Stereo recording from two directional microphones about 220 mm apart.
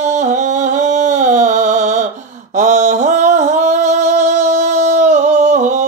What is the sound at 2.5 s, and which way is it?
Music, 35° right (ahead or behind).